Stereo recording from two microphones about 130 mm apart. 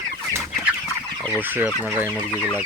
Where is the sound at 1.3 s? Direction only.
15° right (ahead or behind).